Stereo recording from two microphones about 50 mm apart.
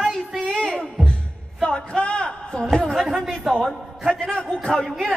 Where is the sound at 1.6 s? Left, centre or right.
Centre.